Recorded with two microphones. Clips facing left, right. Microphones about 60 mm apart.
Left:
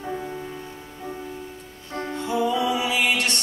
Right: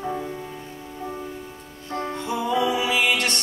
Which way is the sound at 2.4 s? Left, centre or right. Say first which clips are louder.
Right 1 dB; right.